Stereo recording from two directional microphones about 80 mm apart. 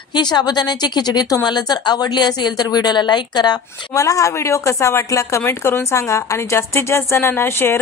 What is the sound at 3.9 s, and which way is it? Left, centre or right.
Speech, left.